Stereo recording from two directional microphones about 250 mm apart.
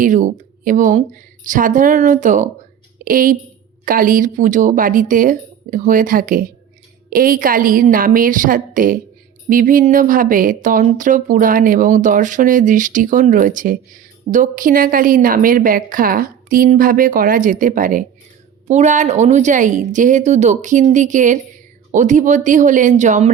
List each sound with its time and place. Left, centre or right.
0.0 s a woman's voice: right